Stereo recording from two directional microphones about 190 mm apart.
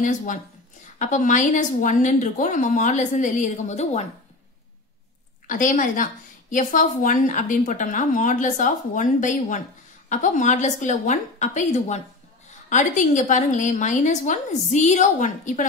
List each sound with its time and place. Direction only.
0.0 s a woman's voice: 40° left (ahead or behind)
5.5 s a woman's voice: 45° left (ahead or behind)